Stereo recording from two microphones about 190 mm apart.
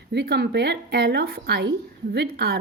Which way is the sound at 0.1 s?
60° right (ahead or behind).